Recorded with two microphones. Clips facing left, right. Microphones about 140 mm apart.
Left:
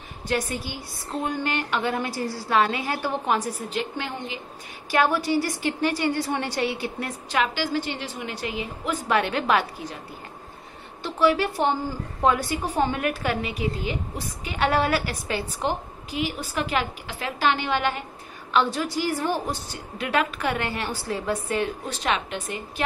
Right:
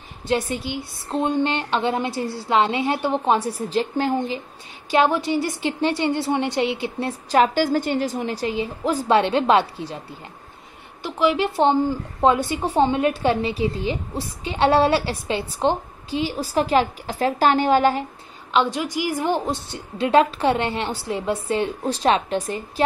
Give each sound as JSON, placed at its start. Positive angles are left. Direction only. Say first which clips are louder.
{"t": 0.3, "sound": "a woman's voice", "louder": "right 4 dB", "side_deg": -25}
{"t": 4.9, "sound": "a woman's voice", "louder": "right 3 dB", "side_deg": -20}
{"t": 11.0, "sound": "a woman's voice", "louder": "right 1 dB", "side_deg": -15}
{"t": 18.5, "sound": "a woman's voice", "louder": "right 2 dB", "side_deg": -15}